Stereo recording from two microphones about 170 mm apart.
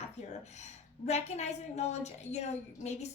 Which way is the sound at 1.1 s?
40° left (ahead or behind).